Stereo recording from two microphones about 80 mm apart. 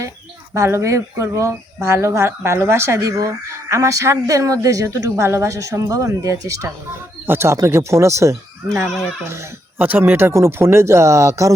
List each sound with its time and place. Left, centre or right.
0.5 s speech: right
8.9 s speech: centre
9.7 s speech: right